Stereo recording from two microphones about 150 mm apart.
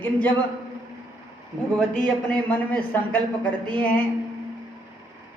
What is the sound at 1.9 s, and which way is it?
A woman's voice, 10° left (ahead or behind).